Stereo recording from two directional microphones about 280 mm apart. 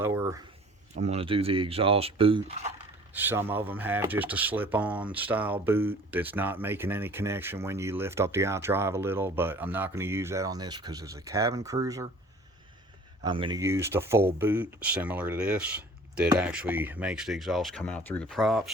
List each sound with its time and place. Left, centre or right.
0.0 s a sound: centre
0.9 s speech: right
3.2 s speech: centre
13.2 s speech: centre